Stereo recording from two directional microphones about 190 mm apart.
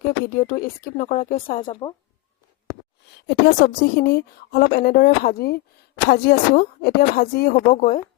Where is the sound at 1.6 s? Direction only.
20° left (ahead or behind).